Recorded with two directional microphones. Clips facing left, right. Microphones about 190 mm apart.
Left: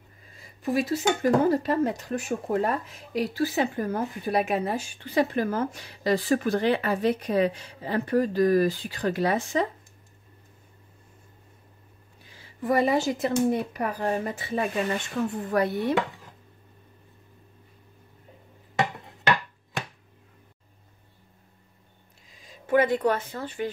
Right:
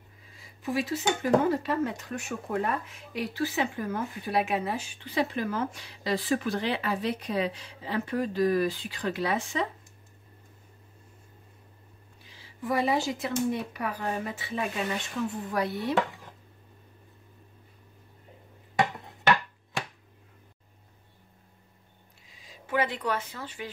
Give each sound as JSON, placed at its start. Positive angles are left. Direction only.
{"t": 0.6, "sound": "speech", "side_deg": 40}
{"t": 12.4, "sound": "speech", "side_deg": 50}
{"t": 22.4, "sound": "speech", "side_deg": 50}